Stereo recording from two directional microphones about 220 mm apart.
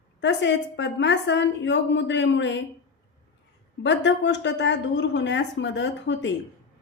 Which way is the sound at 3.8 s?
55° left (ahead or behind).